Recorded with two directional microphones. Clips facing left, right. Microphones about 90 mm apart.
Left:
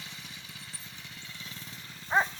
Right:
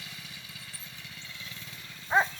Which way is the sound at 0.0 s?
25° left (ahead or behind).